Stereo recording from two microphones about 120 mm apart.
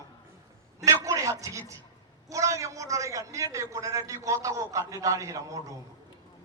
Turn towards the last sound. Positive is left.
turn(degrees=-25)  # may be behind; listen again after turning